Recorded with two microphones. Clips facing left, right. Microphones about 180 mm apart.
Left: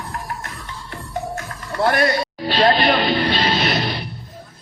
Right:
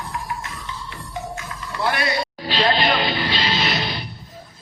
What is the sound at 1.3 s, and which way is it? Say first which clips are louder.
Music: left 3 dB; 50° left (ahead or behind).